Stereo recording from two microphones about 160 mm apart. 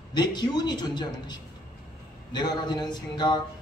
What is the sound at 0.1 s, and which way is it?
A man's voice, 25° left (ahead or behind).